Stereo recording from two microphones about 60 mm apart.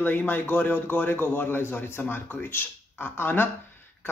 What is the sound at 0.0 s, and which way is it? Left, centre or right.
Speech, left.